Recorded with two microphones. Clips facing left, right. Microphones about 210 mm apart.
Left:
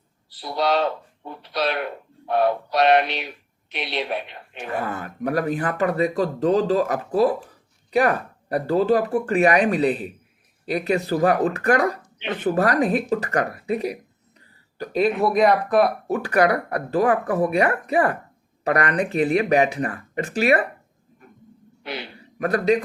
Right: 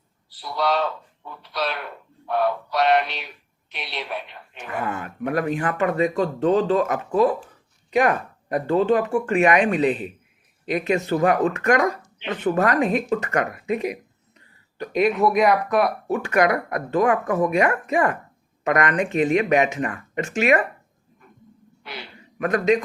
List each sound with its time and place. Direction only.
0.4 s speech: 20° left (ahead or behind)
4.7 s speech: 35° left (ahead or behind)
22.2 s a man's voice: 35° left (ahead or behind)